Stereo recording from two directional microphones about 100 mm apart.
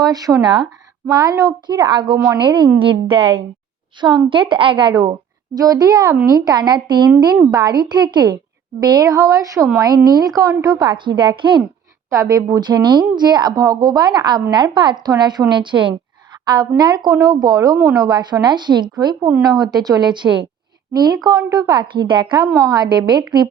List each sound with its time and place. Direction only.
0.0 s a woman's voice: 40° right (ahead or behind)
1.1 s a woman's voice: 40° right (ahead or behind)
2.1 s a woman's voice: 30° right (ahead or behind)
2.4 s a woman's voice: 50° right (ahead or behind)
12.1 s speech: 35° right (ahead or behind); by 16.0 s 55° right (ahead or behind)
16.5 s a woman's voice: 40° right (ahead or behind)
17.7 s a woman's voice: 30° right (ahead or behind)
18.0 s a woman's voice: 45° right (ahead or behind)